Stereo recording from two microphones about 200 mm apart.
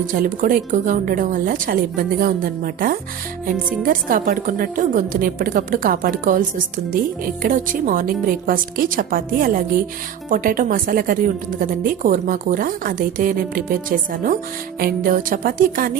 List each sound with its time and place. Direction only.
0.1 s a woman's voice: 45° right (ahead or behind)